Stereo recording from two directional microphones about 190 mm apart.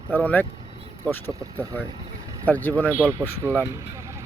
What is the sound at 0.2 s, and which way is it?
Speech, 10° left (ahead or behind).